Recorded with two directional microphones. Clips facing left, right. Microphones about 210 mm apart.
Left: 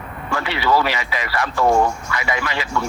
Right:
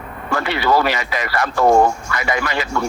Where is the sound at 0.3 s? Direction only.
45° right (ahead or behind).